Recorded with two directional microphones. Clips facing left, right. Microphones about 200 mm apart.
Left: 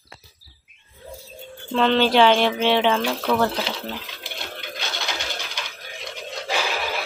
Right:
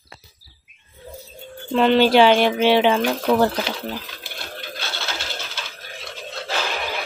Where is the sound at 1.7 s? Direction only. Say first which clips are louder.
Right 3 dB; 10° right (ahead or behind).